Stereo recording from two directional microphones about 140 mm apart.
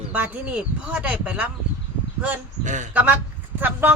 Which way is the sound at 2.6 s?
65° right (ahead or behind).